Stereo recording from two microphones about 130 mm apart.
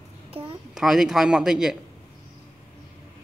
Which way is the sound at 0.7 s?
5° right (ahead or behind).